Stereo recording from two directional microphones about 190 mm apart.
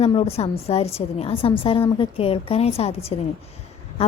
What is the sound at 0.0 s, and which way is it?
A woman's voice, 30° left (ahead or behind).